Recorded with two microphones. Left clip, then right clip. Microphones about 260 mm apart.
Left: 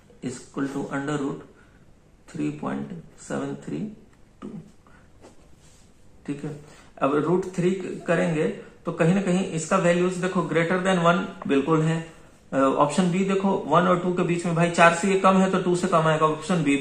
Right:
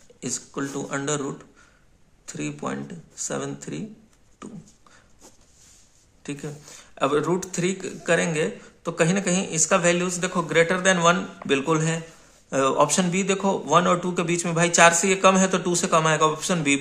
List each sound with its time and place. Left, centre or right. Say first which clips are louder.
0.2 s speech: even; right
2.2 s speech: left 1 dB; right
7.0 s speech: even; right